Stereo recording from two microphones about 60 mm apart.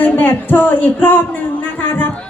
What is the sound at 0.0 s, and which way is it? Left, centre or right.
A woman's voice, left.